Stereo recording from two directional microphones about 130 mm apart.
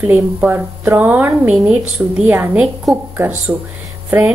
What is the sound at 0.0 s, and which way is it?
Speech, 15° right (ahead or behind).